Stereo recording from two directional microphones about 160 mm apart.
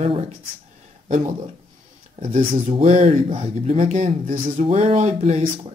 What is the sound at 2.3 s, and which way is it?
Speech, 35° right (ahead or behind).